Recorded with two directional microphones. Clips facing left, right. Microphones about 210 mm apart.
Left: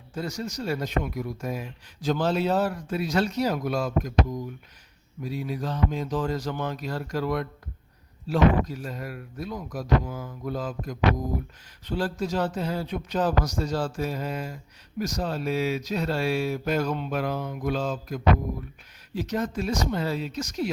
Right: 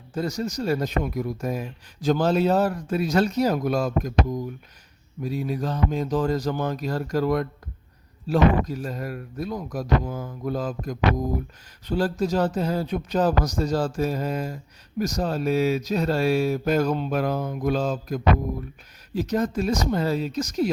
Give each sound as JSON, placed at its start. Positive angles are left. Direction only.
{"t": 0.1, "sound": "speech", "side_deg": -40}
{"t": 5.2, "sound": "speech", "side_deg": -45}